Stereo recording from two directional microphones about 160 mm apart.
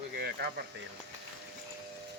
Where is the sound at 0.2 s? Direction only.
80° right.